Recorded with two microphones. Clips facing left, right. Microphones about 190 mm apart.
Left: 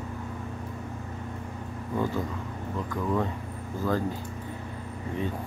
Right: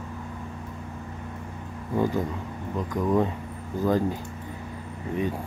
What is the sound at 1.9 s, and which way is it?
Speech, 15° right (ahead or behind).